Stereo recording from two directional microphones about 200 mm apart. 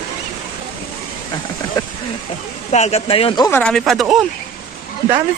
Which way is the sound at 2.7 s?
35° left (ahead or behind).